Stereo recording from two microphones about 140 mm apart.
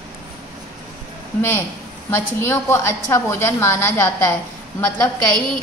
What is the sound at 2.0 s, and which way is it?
A woman's voice, 15° left (ahead or behind).